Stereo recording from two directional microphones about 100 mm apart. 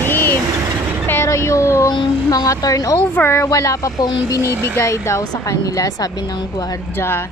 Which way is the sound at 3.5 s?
35° left (ahead or behind).